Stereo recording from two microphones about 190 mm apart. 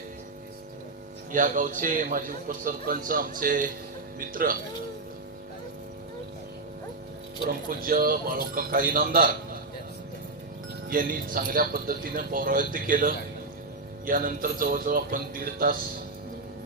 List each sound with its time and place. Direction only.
1.3 s a man's voice: 45° right (ahead or behind)
7.4 s a man's voice: 50° right (ahead or behind)
10.8 s a man's voice: 45° right (ahead or behind)